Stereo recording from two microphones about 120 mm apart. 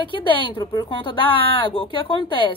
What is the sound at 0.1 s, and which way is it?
Speech, 45° left (ahead or behind).